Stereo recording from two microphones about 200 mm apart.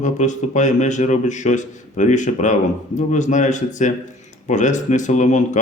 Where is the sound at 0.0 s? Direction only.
35° left (ahead or behind).